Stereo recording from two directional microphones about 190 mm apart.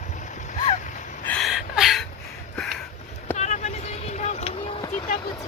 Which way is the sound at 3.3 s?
35° left (ahead or behind).